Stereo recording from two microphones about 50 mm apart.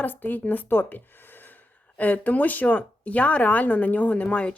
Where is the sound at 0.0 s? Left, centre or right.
Left.